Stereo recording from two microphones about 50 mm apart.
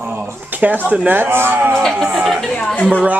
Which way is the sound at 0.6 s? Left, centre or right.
Right.